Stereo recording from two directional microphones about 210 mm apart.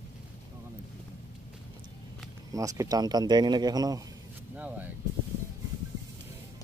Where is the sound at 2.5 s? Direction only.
15° right (ahead or behind).